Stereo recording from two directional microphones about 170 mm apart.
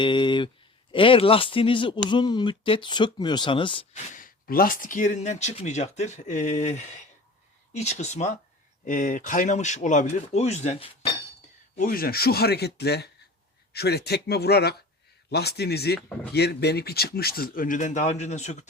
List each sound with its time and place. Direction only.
0.0 s speech: 30° left (ahead or behind)
4.1 s speech: 55° left (ahead or behind); by 11.1 s 35° left (ahead or behind)
11.8 s speech: 60° left (ahead or behind); by 18.7 s 45° left (ahead or behind)